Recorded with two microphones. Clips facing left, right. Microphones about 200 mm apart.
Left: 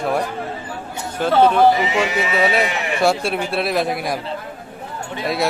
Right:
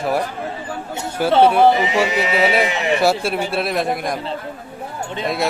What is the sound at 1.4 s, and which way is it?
A man's voice, 10° right (ahead or behind).